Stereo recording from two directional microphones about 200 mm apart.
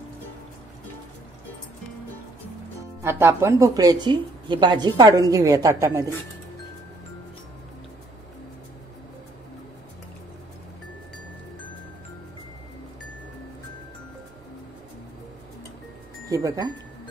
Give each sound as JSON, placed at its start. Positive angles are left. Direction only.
{"t": 3.0, "sound": "speech", "side_deg": -10}
{"t": 16.3, "sound": "speech", "side_deg": -15}